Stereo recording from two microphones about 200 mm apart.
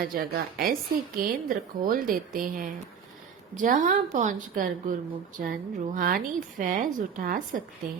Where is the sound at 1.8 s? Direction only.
45° right (ahead or behind).